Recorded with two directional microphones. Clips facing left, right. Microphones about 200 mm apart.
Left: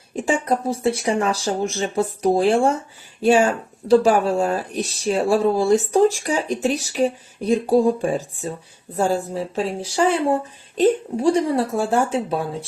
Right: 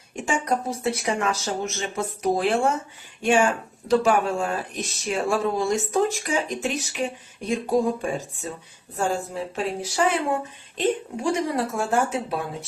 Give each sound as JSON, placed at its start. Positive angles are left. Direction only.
{"t": 0.2, "sound": "speech", "side_deg": 35}